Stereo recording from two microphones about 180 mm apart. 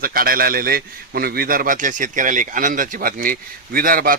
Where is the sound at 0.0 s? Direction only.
55° right (ahead or behind).